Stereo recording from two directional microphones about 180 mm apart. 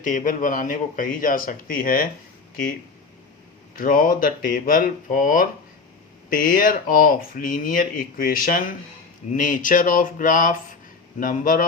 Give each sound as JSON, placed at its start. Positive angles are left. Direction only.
{"t": 0.0, "sound": "speech", "side_deg": 45}
{"t": 3.8, "sound": "speech", "side_deg": 50}